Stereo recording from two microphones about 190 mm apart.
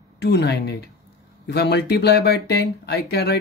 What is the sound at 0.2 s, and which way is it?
Speech, 60° left (ahead or behind).